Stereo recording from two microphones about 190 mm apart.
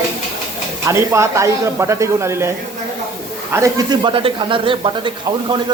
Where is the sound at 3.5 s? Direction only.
15° right (ahead or behind).